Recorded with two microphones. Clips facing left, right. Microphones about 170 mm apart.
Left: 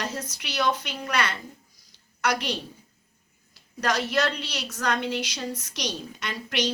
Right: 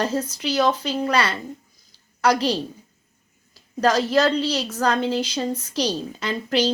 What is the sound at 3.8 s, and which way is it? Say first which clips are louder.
A woman's voice: right 7 dB; 30° right (ahead or behind).